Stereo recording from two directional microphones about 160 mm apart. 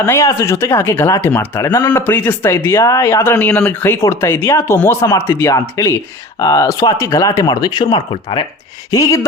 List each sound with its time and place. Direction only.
0.0 s speech: 20° left (ahead or behind)